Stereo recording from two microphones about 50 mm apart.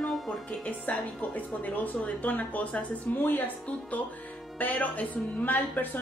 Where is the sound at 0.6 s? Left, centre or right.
Left.